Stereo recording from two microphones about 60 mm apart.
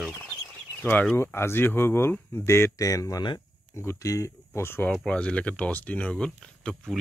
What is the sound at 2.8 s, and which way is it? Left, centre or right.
Speech, left.